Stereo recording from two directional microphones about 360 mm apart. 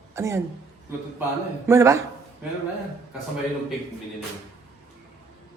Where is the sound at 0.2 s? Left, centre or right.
Centre.